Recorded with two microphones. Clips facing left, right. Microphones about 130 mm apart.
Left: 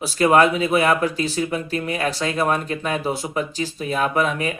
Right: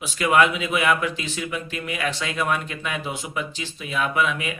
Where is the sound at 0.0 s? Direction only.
40° left (ahead or behind).